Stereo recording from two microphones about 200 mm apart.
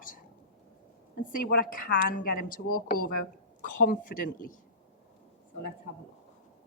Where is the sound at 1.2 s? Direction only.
45° left (ahead or behind).